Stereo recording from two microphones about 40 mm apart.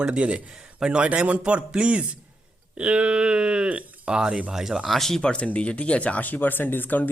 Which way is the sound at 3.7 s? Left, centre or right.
Right.